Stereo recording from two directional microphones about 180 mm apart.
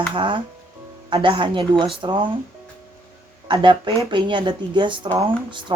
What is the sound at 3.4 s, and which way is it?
Speech, 25° right (ahead or behind).